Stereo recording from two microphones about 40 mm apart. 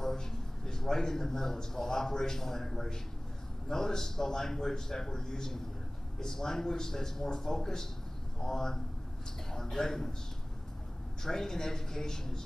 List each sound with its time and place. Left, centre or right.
0.0 s a man's voice: centre
11.2 s a man's voice: centre